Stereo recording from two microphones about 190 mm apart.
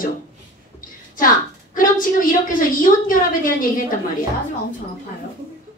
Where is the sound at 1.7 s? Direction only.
45° left (ahead or behind).